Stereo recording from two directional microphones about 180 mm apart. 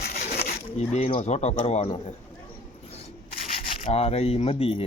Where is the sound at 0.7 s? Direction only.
35° left (ahead or behind).